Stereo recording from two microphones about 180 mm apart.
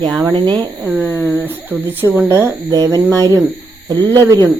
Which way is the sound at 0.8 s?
10° right (ahead or behind).